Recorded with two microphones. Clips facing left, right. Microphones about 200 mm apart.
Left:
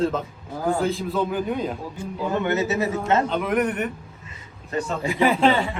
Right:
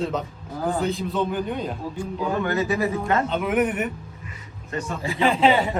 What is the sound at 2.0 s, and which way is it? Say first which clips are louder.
A man's voice: even; 20° left (ahead or behind).